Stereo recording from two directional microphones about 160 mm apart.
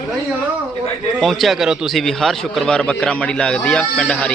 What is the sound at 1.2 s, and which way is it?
A man's voice, centre (ahead or behind).